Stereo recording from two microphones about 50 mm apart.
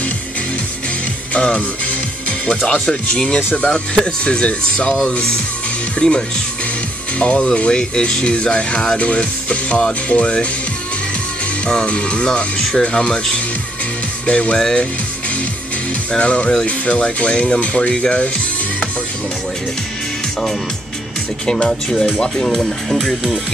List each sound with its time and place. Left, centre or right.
1.3 s speech: left
11.6 s speech: left
16.1 s speech: left
21.5 s speech: centre
21.8 s speech: centre